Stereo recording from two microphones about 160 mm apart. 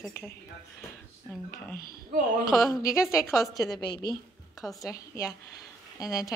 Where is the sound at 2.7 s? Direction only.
20° left (ahead or behind).